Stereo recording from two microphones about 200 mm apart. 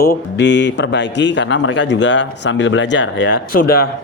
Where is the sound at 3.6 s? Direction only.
50° left (ahead or behind).